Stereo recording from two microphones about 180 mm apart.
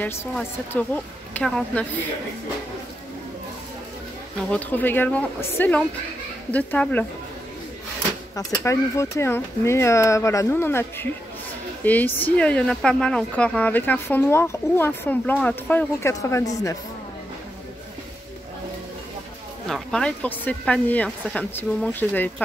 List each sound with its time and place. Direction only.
0.7 s a woman's voice: 10° left (ahead or behind)
4.5 s a woman's voice: 10° left (ahead or behind)
8.4 s a woman's voice: 15° left (ahead or behind)
19.7 s a woman's voice: 5° left (ahead or behind)